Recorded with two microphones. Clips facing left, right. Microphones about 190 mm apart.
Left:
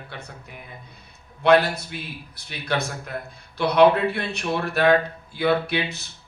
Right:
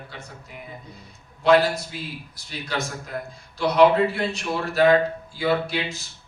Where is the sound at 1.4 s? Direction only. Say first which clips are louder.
Even; 60° left (ahead or behind).